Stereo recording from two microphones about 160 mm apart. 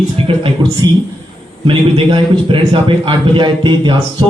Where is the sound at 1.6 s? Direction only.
30° right (ahead or behind).